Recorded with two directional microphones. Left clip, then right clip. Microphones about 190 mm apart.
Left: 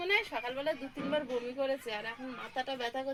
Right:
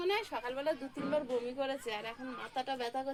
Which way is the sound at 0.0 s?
40° right (ahead or behind).